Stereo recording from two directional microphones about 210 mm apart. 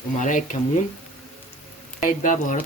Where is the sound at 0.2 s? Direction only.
35° left (ahead or behind).